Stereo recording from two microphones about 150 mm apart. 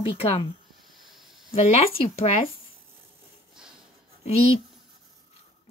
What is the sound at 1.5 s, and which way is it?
Speech, 45° left (ahead or behind).